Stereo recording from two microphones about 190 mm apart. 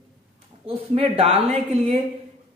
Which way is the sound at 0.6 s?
30° right (ahead or behind).